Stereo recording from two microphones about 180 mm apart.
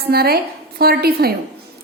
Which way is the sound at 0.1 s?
60° right (ahead or behind).